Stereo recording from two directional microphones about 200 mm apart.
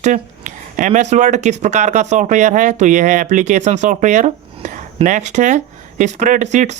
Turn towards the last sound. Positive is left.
turn(degrees=-35)  # may be behind; listen again after turning